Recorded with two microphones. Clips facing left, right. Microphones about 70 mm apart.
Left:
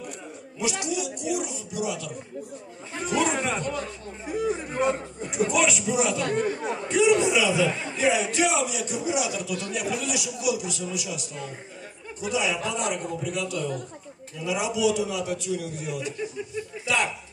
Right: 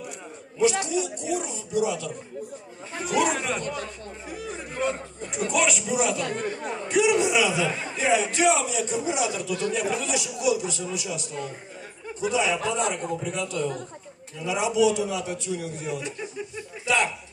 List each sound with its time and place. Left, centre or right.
0.6 s a man's voice: right
3.0 s a man's voice: centre
8.0 s a man's voice: right